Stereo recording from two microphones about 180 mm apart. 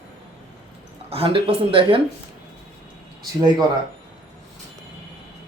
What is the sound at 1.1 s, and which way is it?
Speech, 30° right (ahead or behind).